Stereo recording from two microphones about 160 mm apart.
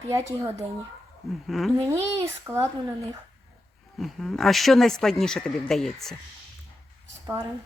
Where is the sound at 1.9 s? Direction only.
15° right (ahead or behind).